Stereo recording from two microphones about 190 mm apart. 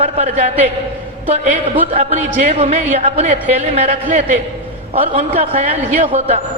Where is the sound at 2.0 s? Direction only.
35° right (ahead or behind).